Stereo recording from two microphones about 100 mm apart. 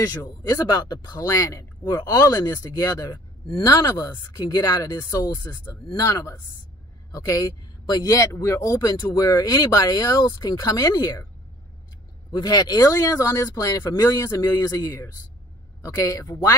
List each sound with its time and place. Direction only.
0.4 s speech: 45° left (ahead or behind)
12.3 s speech: 40° left (ahead or behind)